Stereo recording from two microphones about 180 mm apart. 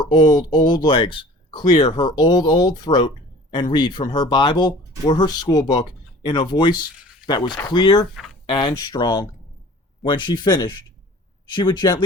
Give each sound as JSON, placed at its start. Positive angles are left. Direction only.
{"t": 0.0, "sound": "speech", "side_deg": 25}